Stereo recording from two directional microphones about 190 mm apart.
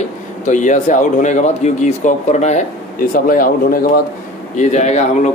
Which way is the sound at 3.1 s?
50° left (ahead or behind).